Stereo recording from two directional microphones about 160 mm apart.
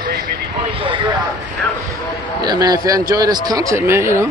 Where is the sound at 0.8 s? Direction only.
30° right (ahead or behind).